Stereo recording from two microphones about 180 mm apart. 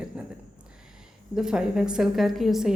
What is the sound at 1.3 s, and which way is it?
Speech, 5° right (ahead or behind).